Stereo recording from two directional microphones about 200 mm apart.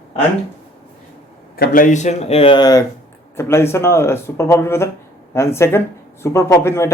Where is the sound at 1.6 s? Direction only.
45° left (ahead or behind); by 6.9 s 15° left (ahead or behind).